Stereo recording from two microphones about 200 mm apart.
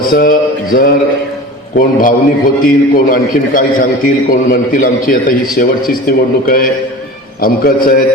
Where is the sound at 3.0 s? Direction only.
45° left (ahead or behind).